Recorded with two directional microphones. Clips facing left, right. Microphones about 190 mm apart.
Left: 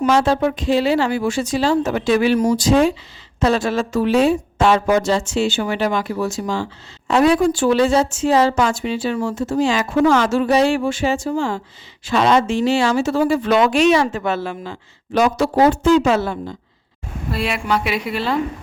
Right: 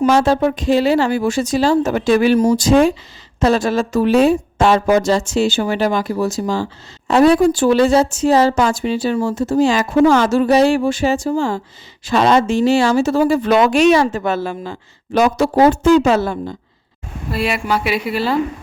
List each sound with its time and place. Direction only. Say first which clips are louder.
0.0 s a woman's voice: right 2 dB; 40° right (ahead or behind)
17.3 s a woman's voice: right 2 dB; 5° right (ahead or behind)